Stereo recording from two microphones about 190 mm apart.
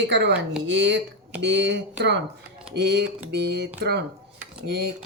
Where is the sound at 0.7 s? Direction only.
65° right (ahead or behind).